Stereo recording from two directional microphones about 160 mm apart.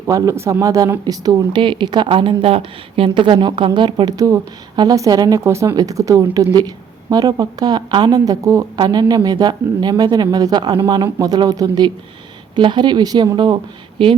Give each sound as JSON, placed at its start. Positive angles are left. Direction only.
{"t": 0.1, "sound": "a woman's voice", "side_deg": -20}